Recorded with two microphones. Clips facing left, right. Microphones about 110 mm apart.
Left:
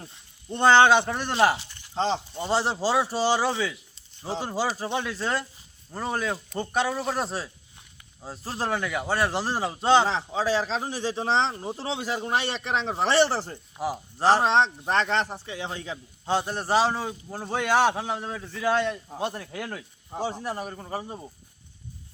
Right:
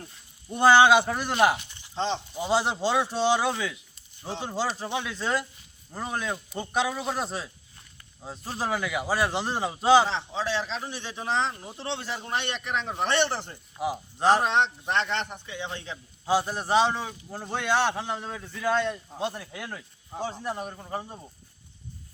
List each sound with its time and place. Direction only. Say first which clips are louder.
0.4 s a man's voice: even; 5° right (ahead or behind)
2.0 s a man's voice: left 3 dB; 35° left (ahead or behind)
2.3 s a man's voice: even; centre (ahead or behind)
10.1 s a man's voice: left 4 dB; 40° left (ahead or behind)
11.9 s a man's voice: left 2 dB; 10° left (ahead or behind)
12.5 s a man's voice: left 3 dB; 35° left (ahead or behind)
13.7 s a man's voice: even; centre (ahead or behind)
14.4 s a man's voice: left 3 dB; 35° left (ahead or behind)
16.2 s a man's voice: right 1 dB; 5° right (ahead or behind)
20.1 s a man's voice: left 2 dB; 10° left (ahead or behind)